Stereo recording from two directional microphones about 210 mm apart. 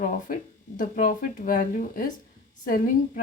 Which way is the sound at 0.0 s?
35° left (ahead or behind).